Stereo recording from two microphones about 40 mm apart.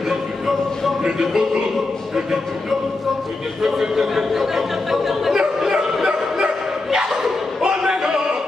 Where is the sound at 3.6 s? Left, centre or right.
Centre.